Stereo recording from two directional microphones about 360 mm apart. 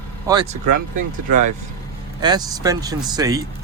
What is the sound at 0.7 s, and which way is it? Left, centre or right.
Speech, right.